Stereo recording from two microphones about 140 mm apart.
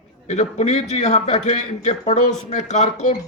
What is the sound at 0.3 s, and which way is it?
A man's voice, 55° left (ahead or behind).